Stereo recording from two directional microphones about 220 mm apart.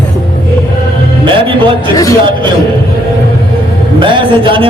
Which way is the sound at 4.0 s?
20° right (ahead or behind).